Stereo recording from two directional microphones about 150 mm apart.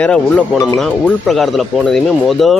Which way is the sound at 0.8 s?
Centre (ahead or behind).